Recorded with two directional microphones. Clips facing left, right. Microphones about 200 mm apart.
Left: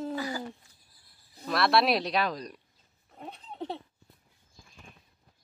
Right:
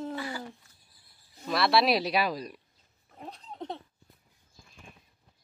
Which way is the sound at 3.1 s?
5° left (ahead or behind).